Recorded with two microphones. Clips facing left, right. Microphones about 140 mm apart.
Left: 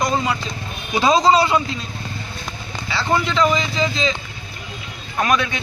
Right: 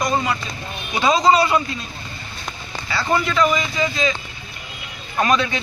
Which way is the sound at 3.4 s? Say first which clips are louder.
Left 1 dB; 25° left (ahead or behind).